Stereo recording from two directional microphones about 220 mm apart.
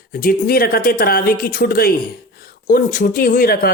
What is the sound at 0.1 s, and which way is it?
Speech, 40° left (ahead or behind).